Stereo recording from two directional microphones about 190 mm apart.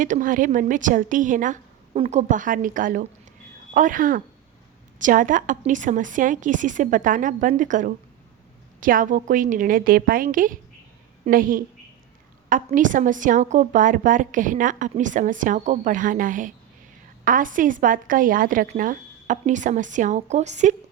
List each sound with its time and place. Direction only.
0.0 s a woman's voice: 45° right (ahead or behind)